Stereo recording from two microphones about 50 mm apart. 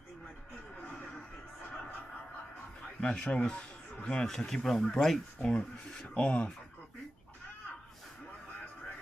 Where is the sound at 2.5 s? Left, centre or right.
Left.